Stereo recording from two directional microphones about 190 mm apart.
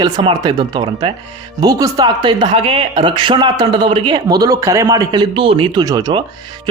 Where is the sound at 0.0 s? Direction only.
25° right (ahead or behind).